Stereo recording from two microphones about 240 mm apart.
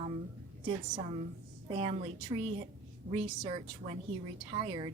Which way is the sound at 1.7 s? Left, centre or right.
Right.